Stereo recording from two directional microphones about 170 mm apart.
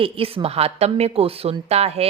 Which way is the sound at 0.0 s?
35° right (ahead or behind).